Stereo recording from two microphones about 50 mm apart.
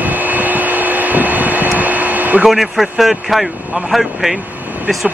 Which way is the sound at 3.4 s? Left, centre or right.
Right.